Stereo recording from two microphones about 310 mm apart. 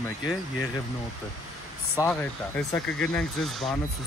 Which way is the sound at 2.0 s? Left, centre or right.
Centre.